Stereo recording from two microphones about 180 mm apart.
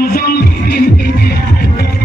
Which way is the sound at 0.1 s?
55° left (ahead or behind).